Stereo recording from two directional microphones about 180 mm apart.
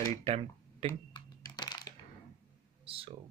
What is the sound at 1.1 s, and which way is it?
Typing, 20° left (ahead or behind).